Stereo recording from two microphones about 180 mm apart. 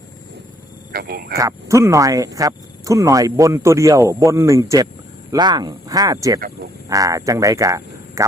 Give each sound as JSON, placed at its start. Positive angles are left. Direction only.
{"t": 0.9, "sound": "speech", "side_deg": -55}
{"t": 1.4, "sound": "speech", "side_deg": -15}